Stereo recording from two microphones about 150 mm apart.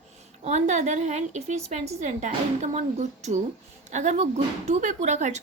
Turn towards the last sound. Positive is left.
turn(degrees=-50)  # may be behind; listen again after turning